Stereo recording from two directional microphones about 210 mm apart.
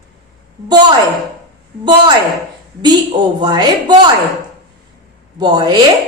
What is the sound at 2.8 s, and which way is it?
A woman's voice, 20° right (ahead or behind).